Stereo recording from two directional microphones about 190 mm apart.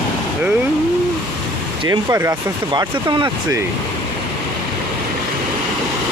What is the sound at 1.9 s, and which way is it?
Speech, 15° right (ahead or behind).